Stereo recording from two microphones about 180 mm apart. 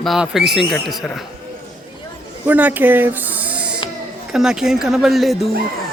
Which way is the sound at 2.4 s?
10° right (ahead or behind).